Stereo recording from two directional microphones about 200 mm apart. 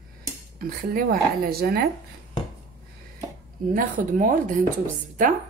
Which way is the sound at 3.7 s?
40° right (ahead or behind).